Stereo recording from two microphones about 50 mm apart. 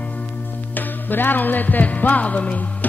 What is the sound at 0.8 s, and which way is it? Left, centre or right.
Music, left.